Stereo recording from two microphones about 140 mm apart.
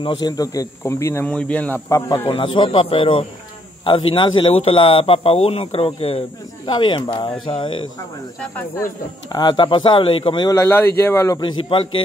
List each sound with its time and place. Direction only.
0.0 s a man's voice: 30° left (ahead or behind); by 1.8 s 10° left (ahead or behind)
1.9 s a man's voice: 20° left (ahead or behind)
2.2 s a man's voice: 35° left (ahead or behind)
9.3 s a man's voice: 30° left (ahead or behind)
10.5 s speech: 20° left (ahead or behind)
11.3 s a man's voice: 35° left (ahead or behind)